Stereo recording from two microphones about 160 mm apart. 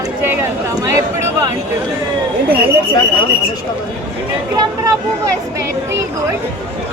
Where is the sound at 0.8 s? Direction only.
20° right (ahead or behind).